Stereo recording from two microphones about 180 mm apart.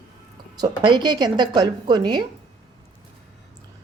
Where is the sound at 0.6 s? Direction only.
25° right (ahead or behind).